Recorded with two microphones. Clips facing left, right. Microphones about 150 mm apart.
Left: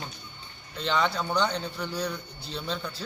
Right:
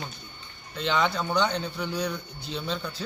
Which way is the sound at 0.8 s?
Centre (ahead or behind).